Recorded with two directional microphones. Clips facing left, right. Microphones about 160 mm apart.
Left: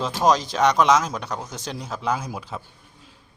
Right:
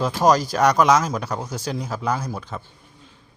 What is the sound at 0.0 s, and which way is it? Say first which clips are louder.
Speech: right 2 dB; centre (ahead or behind).